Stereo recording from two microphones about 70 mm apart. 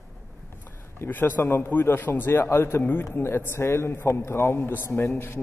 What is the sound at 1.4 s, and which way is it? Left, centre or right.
A man's voice, left.